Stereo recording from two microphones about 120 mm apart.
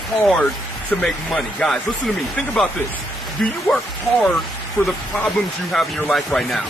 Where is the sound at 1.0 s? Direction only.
5° left (ahead or behind).